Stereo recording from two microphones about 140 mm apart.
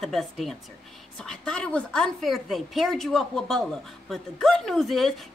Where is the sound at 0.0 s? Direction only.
Centre (ahead or behind).